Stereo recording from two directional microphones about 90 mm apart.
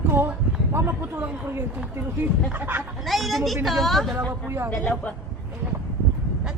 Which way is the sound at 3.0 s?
Centre (ahead or behind).